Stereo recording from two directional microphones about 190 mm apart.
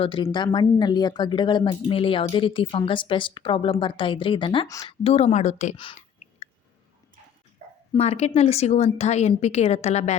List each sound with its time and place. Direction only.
0.0 s speech: 25° left (ahead or behind)
7.9 s a woman's voice: 35° left (ahead or behind)